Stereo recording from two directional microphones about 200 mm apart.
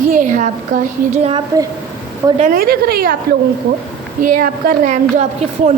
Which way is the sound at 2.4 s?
45° right (ahead or behind).